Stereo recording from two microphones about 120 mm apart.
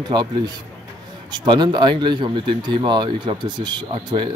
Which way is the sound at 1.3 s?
40° right (ahead or behind).